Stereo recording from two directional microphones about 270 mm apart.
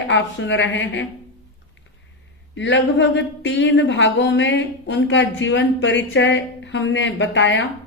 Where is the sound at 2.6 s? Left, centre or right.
Left.